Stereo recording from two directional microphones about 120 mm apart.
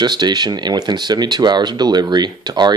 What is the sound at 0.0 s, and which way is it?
Speech, 35° right (ahead or behind).